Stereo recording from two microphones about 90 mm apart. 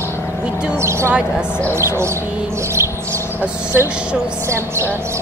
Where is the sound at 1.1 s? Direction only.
15° right (ahead or behind).